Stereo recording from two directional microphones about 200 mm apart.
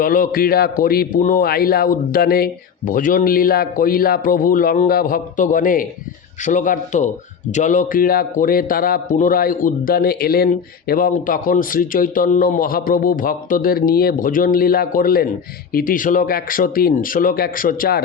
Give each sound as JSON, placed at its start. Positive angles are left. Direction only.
{"t": 0.0, "sound": "a man's voice", "side_deg": 45}